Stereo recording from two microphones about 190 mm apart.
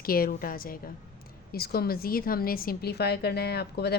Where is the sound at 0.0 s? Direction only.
50° left (ahead or behind).